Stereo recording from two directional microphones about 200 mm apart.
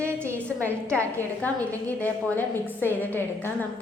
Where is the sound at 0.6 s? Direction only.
15° right (ahead or behind).